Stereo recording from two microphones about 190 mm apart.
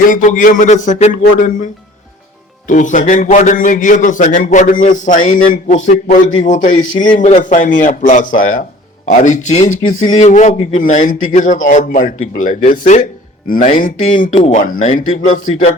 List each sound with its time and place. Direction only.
0.0 s speech: 45° left (ahead or behind)
2.6 s a man's voice: 40° left (ahead or behind)